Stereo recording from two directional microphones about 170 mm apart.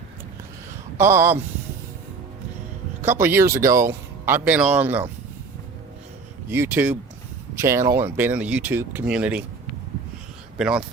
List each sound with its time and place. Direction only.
0.9 s speech: 15° right (ahead or behind)
3.0 s speech: 15° right (ahead or behind)
6.5 s speech: 10° right (ahead or behind)
10.6 s speech: 5° right (ahead or behind)